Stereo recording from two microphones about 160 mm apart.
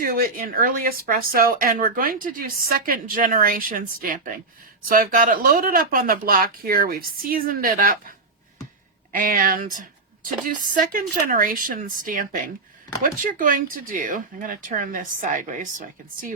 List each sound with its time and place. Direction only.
0.0 s speech: 60° right (ahead or behind)
9.2 s speech: 60° right (ahead or behind)